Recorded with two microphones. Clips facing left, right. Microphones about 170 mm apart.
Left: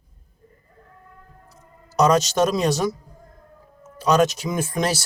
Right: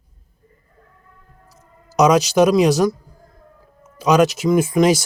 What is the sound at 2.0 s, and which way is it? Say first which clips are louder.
Speech: right 4 dB; 10° right (ahead or behind).